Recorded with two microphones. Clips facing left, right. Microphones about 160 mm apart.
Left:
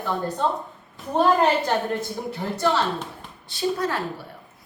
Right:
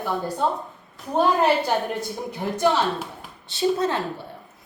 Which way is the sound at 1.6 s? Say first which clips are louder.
Even; 15° right (ahead or behind).